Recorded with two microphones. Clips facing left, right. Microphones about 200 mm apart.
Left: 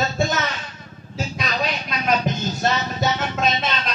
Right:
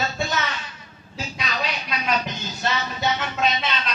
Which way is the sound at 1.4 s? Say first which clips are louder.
Left 3 dB; 45° left (ahead or behind).